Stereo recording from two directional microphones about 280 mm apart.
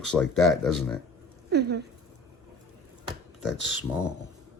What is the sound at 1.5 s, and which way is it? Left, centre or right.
Speech, right.